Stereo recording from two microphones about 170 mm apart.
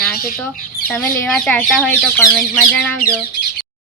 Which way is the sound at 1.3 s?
5° left (ahead or behind).